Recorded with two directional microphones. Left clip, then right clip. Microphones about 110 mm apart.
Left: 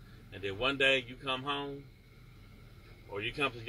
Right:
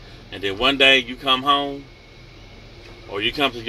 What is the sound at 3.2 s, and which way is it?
Speech, 15° right (ahead or behind).